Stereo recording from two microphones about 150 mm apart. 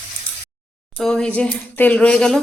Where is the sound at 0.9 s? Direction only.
5° left (ahead or behind).